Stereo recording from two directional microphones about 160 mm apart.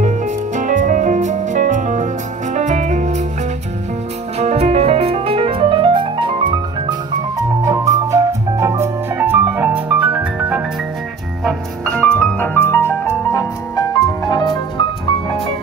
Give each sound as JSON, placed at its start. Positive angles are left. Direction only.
{"t": 0.0, "sound": "music", "side_deg": -50}
{"t": 4.4, "sound": "music", "side_deg": -40}
{"t": 11.4, "sound": "music", "side_deg": 5}